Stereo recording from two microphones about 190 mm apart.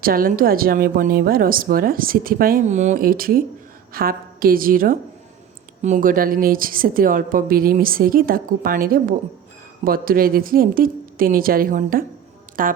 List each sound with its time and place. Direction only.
0.0 s a woman's voice: 50° right (ahead or behind)